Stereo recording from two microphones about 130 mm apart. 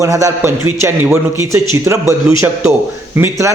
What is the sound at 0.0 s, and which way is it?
A man's voice, 25° right (ahead or behind).